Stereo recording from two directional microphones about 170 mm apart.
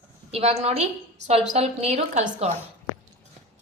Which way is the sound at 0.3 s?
35° right (ahead or behind).